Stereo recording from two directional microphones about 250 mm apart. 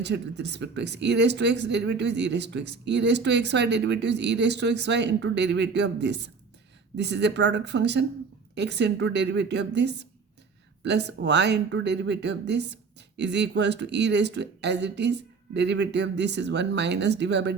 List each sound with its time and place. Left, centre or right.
0.0 s speech: right